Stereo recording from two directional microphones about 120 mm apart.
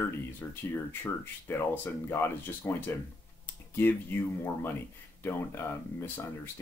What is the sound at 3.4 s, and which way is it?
Computer keyboard, 15° left (ahead or behind).